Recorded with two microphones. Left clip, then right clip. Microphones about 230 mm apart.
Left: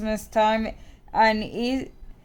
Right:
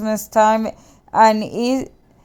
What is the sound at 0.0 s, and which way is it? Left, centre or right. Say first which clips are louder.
A woman's voice: right 7 dB; centre.